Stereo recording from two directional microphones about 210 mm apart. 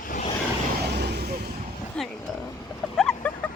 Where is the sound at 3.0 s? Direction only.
5° left (ahead or behind).